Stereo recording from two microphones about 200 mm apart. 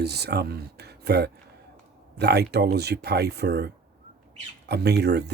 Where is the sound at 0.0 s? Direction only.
55° right (ahead or behind).